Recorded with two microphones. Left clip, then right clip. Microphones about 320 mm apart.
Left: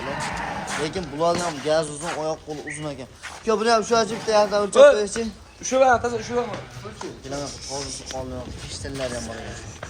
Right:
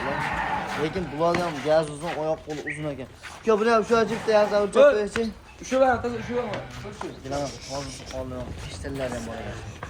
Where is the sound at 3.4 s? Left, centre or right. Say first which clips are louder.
Left 1 dB; centre.